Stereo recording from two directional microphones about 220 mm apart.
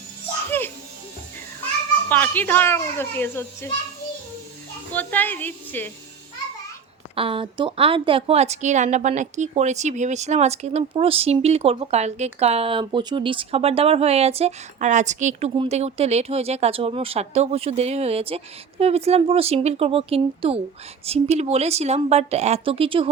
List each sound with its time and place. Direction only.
2.0 s a child's voice: 10° left (ahead or behind)
4.9 s a child's voice: 10° left (ahead or behind)
7.2 s a woman's voice: 25° right (ahead or behind)